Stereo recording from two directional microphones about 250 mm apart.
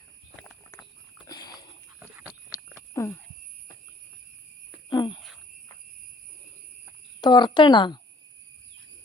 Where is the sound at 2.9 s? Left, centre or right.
Centre.